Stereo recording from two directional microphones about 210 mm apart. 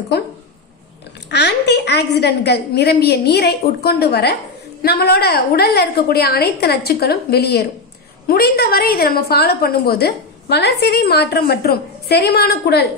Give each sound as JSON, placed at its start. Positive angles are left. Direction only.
{"t": 1.3, "sound": "a woman's voice", "side_deg": 55}